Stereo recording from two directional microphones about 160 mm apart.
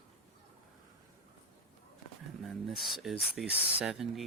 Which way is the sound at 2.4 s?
Centre (ahead or behind).